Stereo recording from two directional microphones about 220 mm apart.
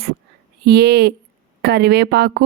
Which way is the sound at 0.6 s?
50° right (ahead or behind).